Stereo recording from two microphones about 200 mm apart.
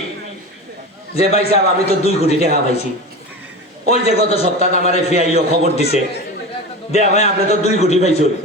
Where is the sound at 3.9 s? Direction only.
30° left (ahead or behind).